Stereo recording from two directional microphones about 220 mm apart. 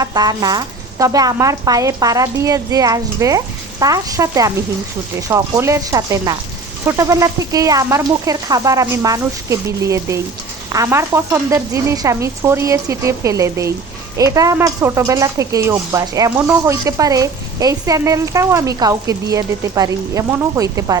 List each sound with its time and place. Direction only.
0.0 s speech: 15° right (ahead or behind)